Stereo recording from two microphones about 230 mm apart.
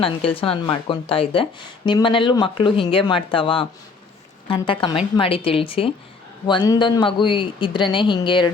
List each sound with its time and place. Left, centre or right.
0.3 s speech: left